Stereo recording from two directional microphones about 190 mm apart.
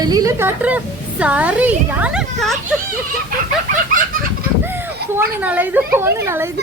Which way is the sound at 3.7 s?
45° right (ahead or behind).